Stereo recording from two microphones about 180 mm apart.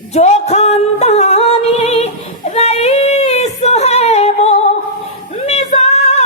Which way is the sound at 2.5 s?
35° left (ahead or behind).